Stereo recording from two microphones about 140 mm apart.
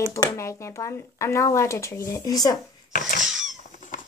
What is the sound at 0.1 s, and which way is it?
Speech, 20° left (ahead or behind).